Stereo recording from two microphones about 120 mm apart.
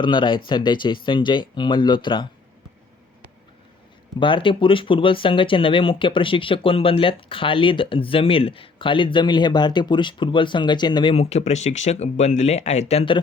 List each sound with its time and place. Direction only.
0.0 s speech: 40° left (ahead or behind)
4.2 s speech: 45° left (ahead or behind)
11.1 s speech: 65° left (ahead or behind)